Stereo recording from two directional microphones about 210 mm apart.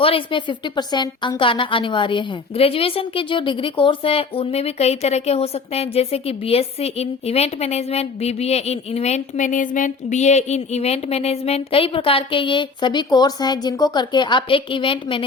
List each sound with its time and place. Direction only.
0.0 s a woman's voice: 25° left (ahead or behind)